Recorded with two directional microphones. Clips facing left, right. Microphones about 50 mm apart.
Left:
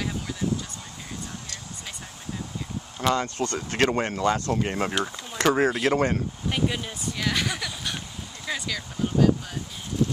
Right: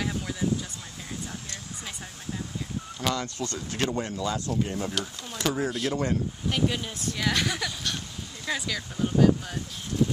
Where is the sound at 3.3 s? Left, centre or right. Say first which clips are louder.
Left 6 dB; left.